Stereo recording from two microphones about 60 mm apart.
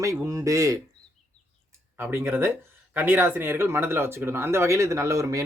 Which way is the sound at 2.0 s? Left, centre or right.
Right.